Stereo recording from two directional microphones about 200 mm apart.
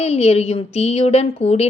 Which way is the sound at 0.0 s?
30° left (ahead or behind).